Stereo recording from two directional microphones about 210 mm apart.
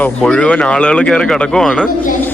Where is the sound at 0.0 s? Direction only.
5° left (ahead or behind).